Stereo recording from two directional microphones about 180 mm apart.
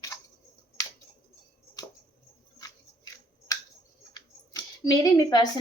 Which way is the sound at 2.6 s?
20° left (ahead or behind).